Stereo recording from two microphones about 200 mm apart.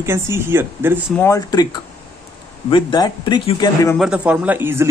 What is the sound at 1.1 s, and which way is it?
A man's voice, 15° left (ahead or behind).